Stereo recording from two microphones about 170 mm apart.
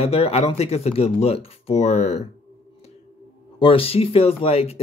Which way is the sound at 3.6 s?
30° left (ahead or behind).